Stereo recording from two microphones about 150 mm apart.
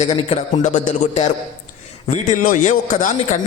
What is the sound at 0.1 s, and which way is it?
Speech, 35° left (ahead or behind).